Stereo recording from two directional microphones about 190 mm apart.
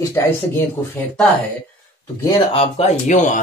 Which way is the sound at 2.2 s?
30° left (ahead or behind).